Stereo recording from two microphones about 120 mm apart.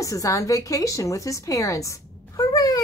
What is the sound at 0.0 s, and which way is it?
A woman's voice, 30° left (ahead or behind).